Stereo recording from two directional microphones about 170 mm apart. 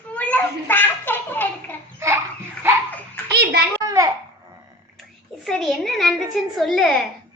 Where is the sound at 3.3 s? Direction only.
70° right (ahead or behind).